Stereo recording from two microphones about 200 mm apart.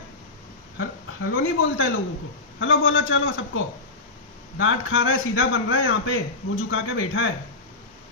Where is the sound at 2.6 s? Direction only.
80° left.